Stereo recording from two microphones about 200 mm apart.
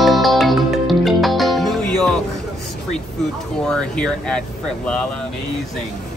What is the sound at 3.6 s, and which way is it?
Speech, 5° left (ahead or behind).